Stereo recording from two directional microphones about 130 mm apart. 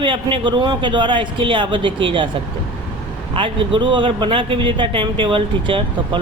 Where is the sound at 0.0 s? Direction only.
40° right (ahead or behind).